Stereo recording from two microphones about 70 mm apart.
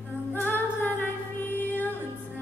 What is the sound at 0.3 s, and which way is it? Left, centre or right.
Music, left.